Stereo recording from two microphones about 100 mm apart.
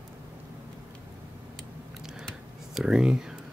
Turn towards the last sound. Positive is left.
turn(degrees=-5)  # may be behind; listen again after turning